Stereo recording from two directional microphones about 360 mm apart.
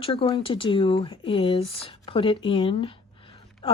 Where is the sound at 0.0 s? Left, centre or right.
Centre.